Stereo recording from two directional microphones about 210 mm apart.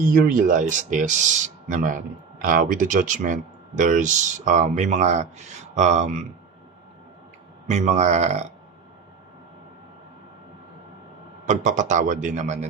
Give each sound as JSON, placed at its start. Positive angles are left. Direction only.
{"t": 0.0, "sound": "speech", "side_deg": -40}
{"t": 7.7, "sound": "speech", "side_deg": -35}
{"t": 11.4, "sound": "speech", "side_deg": -35}